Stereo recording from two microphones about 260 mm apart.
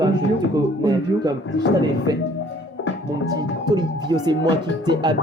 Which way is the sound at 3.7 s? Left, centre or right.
Centre.